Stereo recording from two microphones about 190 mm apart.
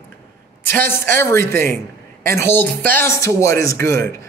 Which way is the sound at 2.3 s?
10° left (ahead or behind).